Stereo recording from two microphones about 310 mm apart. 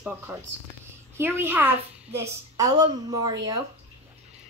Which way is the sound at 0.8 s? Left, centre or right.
Centre.